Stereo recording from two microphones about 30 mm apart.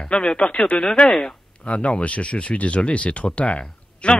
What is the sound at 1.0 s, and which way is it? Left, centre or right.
Speech, centre.